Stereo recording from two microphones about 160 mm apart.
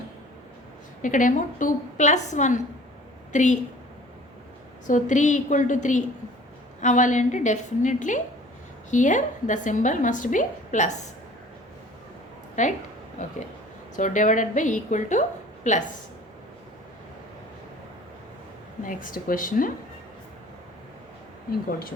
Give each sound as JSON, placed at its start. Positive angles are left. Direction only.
{"t": 1.0, "sound": "a woman's voice", "side_deg": 55}
{"t": 4.9, "sound": "a woman's voice", "side_deg": 50}
{"t": 12.6, "sound": "a woman's voice", "side_deg": 50}
{"t": 13.9, "sound": "a woman's voice", "side_deg": 50}
{"t": 18.9, "sound": "speech", "side_deg": 60}